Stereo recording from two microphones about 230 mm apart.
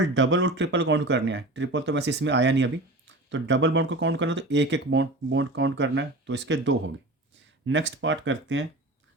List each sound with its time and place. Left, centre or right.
0.0 s speech: right